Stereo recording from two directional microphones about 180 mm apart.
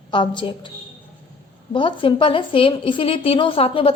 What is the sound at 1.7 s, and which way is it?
A woman's voice, 25° left (ahead or behind).